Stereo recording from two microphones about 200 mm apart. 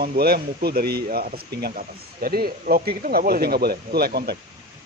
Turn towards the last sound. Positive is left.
turn(degrees=-50)  # may be behind; listen again after turning